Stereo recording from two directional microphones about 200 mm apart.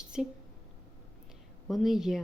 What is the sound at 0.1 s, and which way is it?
Speech, 5° right (ahead or behind).